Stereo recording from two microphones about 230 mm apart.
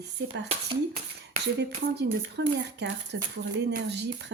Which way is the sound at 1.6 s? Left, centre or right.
Right.